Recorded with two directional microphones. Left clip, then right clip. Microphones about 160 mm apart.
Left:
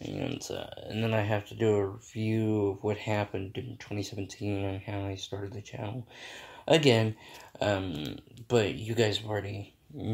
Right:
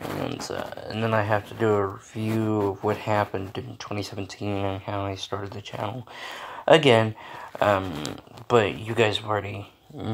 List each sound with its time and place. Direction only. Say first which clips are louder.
0.2 s speech: right 6 dB; 20° left (ahead or behind)
7.5 s speech: right 8 dB; 20° left (ahead or behind)